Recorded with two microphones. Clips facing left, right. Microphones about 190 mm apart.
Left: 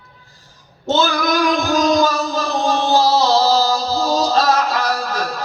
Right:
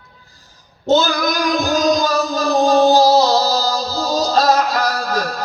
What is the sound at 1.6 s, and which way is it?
Music, 40° right (ahead or behind).